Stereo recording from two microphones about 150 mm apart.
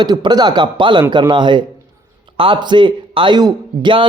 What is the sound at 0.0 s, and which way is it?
Speech, 30° right (ahead or behind).